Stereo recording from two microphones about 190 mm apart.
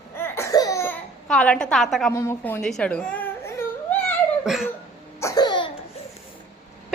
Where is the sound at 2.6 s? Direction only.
5° left (ahead or behind).